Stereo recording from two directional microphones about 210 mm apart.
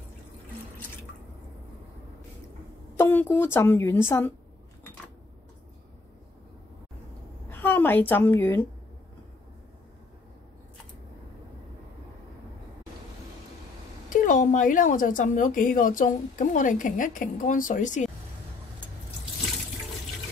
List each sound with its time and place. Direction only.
3.0 s a woman's voice: 10° left (ahead or behind)
7.4 s a woman's voice: 10° left (ahead or behind)
14.0 s a woman's voice: 40° left (ahead or behind)